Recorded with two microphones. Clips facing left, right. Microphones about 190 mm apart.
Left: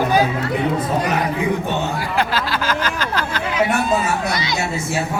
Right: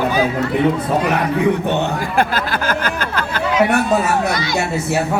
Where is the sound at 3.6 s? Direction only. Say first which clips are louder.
Right 1 dB; 65° right (ahead or behind).